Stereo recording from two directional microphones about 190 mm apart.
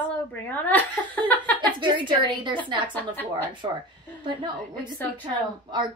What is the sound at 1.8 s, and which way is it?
Speech, 25° right (ahead or behind).